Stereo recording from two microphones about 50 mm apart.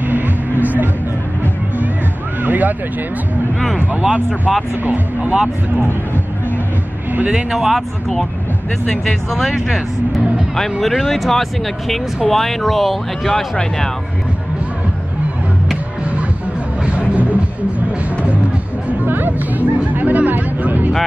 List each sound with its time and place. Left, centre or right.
0.0 s music: right
2.4 s vehicle: right
4.3 s speech: centre
4.8 s speech: right
7.2 s speech: centre
16.8 s a sound: right
19.0 s music: right